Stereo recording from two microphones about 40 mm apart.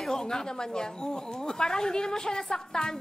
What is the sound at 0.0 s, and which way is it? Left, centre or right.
A woman's voice, centre.